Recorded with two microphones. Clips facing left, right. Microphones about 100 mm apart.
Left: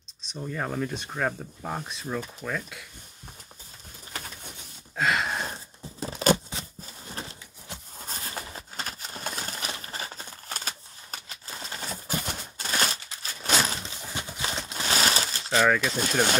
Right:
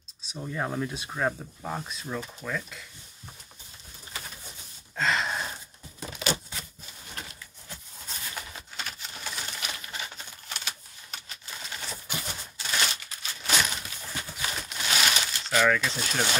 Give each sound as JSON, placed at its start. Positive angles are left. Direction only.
{"t": 0.3, "sound": "speech", "side_deg": -5}
{"t": 2.4, "sound": "speech", "side_deg": 5}
{"t": 4.9, "sound": "a sound", "side_deg": 5}
{"t": 5.5, "sound": "tearing", "side_deg": 35}
{"t": 7.1, "sound": "horse", "side_deg": 30}
{"t": 8.0, "sound": "pigeon", "side_deg": 40}
{"t": 14.0, "sound": "clip-clop", "side_deg": 25}
{"t": 15.6, "sound": "speech", "side_deg": 15}
{"t": 15.9, "sound": "speech", "side_deg": 45}